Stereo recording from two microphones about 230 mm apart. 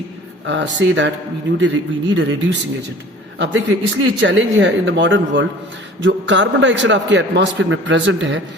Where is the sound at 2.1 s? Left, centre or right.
Right.